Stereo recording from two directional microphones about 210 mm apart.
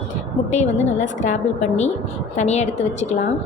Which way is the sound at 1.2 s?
35° left (ahead or behind).